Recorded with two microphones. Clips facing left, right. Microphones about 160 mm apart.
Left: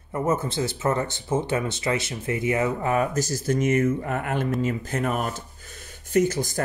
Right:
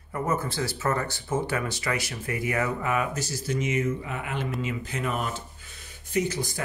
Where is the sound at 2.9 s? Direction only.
40° left (ahead or behind).